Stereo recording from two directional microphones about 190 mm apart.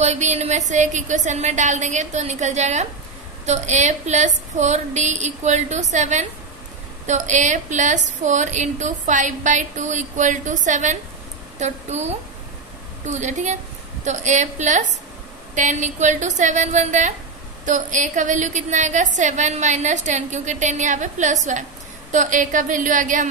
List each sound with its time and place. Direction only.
0.0 s a woman's voice: 35° right (ahead or behind)